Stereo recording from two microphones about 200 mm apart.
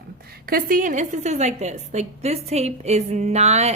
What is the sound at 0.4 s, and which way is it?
Speech, 45° right (ahead or behind).